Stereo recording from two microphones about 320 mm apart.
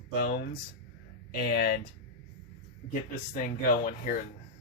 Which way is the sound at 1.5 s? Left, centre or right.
Left.